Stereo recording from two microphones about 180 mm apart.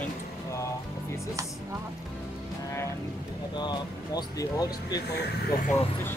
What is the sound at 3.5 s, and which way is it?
Speech, 25° left (ahead or behind).